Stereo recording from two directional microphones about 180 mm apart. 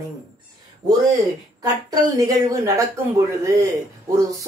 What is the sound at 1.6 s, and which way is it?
Speech, 20° right (ahead or behind).